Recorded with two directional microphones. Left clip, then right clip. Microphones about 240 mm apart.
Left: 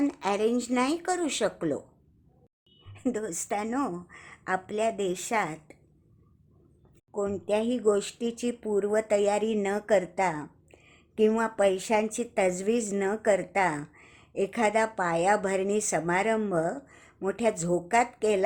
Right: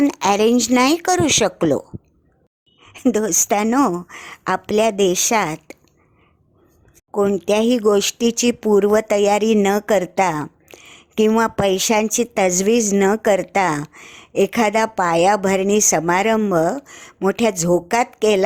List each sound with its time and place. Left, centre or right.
0.0 s speech: right
2.8 s speech: right
7.1 s speech: right